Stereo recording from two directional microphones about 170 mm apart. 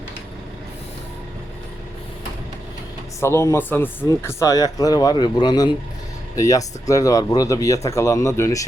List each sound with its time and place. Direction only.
3.2 s speech: 15° left (ahead or behind)